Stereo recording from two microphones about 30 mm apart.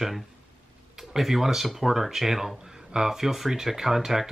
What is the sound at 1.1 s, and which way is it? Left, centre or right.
Speech, centre.